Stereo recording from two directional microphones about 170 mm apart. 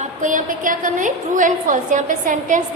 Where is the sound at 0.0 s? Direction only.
50° right (ahead or behind).